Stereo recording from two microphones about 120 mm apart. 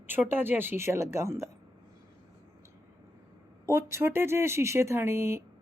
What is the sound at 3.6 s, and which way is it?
Speech, 20° right (ahead or behind).